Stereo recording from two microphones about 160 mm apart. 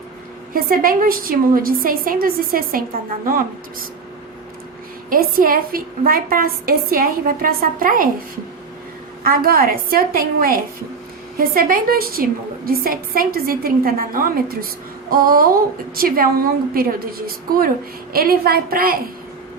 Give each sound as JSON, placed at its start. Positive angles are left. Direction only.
{"t": 0.5, "sound": "a woman's voice", "side_deg": -65}
{"t": 5.0, "sound": "a woman's voice", "side_deg": -60}
{"t": 9.2, "sound": "a woman's voice", "side_deg": -65}